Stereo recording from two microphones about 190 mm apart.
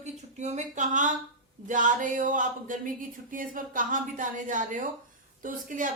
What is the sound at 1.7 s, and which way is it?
Speech, 40° right (ahead or behind).